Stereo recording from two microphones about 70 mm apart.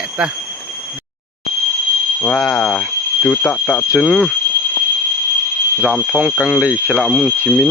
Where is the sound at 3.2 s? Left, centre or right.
Left.